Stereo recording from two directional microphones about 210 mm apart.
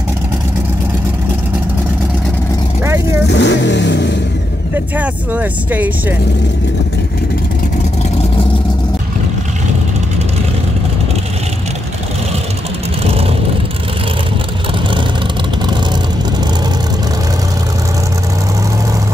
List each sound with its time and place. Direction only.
2.8 s vehicle: 10° right (ahead or behind)
3.3 s vehicle: 60° left (ahead or behind)
4.7 s speech: 5° right (ahead or behind)
13.0 s vehicle: 30° right (ahead or behind)